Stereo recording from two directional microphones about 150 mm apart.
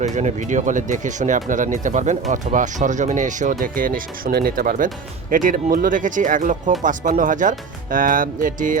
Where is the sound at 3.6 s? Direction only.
70° right (ahead or behind).